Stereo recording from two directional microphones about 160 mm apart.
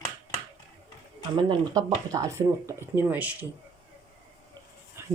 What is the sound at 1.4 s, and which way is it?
Speech, 25° right (ahead or behind).